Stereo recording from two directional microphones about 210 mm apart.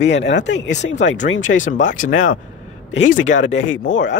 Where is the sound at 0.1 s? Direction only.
60° left (ahead or behind).